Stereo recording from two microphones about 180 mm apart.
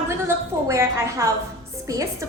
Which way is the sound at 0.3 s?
15° right (ahead or behind).